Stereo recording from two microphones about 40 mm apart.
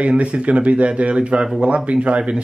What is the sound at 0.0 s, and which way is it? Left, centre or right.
Speech, right.